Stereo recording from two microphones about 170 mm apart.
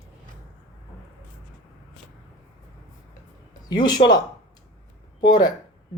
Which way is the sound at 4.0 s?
40° left (ahead or behind).